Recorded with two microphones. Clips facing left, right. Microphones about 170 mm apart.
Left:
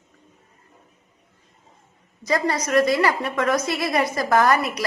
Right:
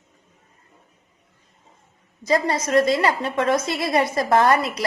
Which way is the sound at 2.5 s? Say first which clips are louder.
Left 1 dB; 25° right (ahead or behind).